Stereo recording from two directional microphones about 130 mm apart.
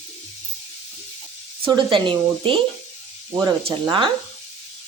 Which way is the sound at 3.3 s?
30° right (ahead or behind).